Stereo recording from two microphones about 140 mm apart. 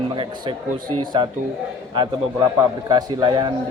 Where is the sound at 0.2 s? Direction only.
35° right (ahead or behind).